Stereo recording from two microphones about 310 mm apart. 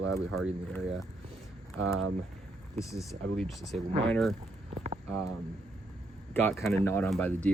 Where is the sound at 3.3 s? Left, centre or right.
Centre.